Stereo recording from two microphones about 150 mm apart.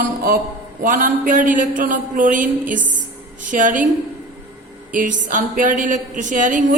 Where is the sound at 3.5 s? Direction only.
60° right (ahead or behind).